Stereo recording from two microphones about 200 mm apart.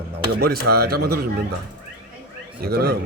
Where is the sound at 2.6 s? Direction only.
50° right (ahead or behind).